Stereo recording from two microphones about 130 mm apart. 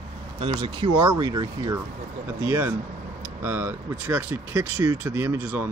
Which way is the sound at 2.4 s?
20° right (ahead or behind).